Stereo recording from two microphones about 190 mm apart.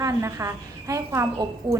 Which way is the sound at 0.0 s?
15° right (ahead or behind).